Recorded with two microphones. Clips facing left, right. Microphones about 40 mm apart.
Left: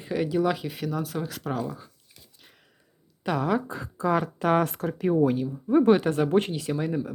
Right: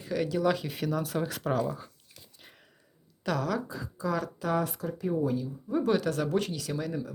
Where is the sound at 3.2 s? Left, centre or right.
Left.